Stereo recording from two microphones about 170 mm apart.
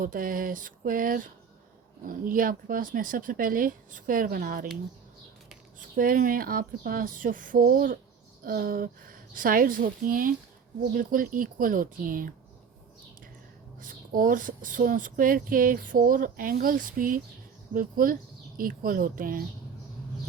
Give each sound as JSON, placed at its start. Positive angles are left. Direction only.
{"t": 0.0, "sound": "speech", "side_deg": -55}
{"t": 6.0, "sound": "speech", "side_deg": -55}
{"t": 13.8, "sound": "speech", "side_deg": -55}